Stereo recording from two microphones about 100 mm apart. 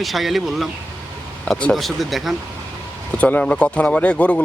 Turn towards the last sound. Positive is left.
turn(degrees=10)  # may be behind; listen again after turning